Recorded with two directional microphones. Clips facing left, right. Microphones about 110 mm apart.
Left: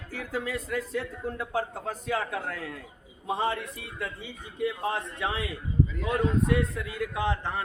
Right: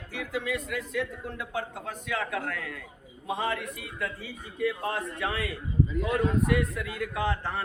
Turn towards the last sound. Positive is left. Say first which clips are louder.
# even
turn(degrees=20)  # may be behind; listen again after turning